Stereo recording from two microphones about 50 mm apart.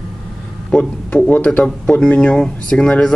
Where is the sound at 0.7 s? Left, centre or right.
Left.